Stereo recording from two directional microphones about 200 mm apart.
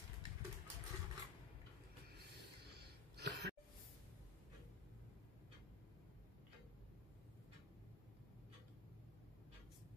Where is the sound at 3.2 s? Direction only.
60° right (ahead or behind).